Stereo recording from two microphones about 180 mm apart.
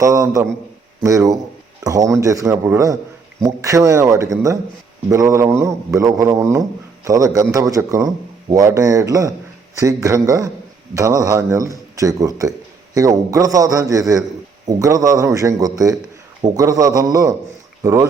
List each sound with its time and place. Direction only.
0.0 s a man's voice: 20° right (ahead or behind)